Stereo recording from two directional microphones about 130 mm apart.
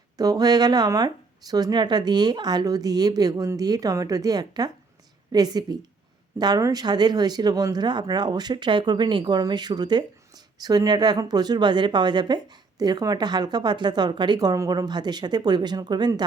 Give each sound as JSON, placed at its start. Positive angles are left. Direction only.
{"t": 0.2, "sound": "speech", "side_deg": -30}